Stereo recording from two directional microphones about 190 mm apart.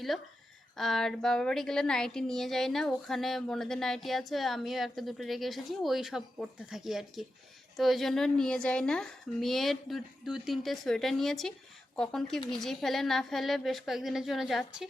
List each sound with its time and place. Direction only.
0.8 s a woman's voice: centre (ahead or behind)